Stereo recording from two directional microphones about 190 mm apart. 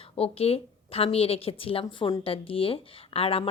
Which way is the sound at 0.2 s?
30° left (ahead or behind).